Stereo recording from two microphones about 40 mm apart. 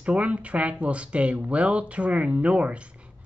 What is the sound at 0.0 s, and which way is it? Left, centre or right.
Speech, right.